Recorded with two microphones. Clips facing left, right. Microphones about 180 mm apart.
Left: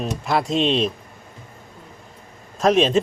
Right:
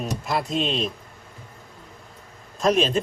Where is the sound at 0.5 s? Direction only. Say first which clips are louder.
Left 6 dB; centre (ahead or behind).